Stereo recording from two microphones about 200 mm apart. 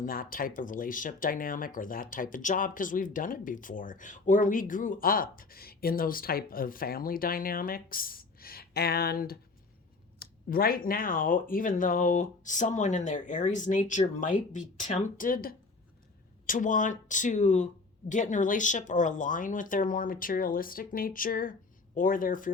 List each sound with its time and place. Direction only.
0.0 s speech: 45° left (ahead or behind)